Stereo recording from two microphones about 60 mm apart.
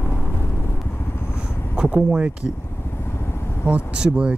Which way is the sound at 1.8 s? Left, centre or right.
Centre.